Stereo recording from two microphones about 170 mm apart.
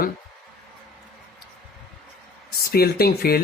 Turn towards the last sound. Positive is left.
turn(degrees=65)  # may be behind; listen again after turning